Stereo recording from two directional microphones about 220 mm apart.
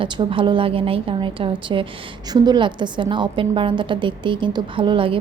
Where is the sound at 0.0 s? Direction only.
25° right (ahead or behind).